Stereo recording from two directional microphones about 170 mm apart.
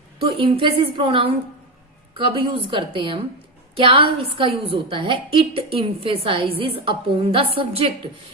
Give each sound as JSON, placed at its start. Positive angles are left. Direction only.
{"t": 0.2, "sound": "a woman's voice", "side_deg": -35}